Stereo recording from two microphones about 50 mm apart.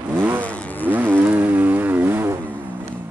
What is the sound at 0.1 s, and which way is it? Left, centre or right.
Vehicle, right.